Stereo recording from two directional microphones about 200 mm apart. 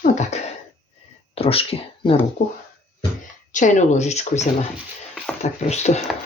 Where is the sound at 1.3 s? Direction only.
30° left (ahead or behind).